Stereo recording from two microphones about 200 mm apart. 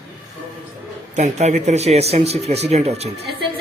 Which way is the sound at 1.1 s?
35° right (ahead or behind).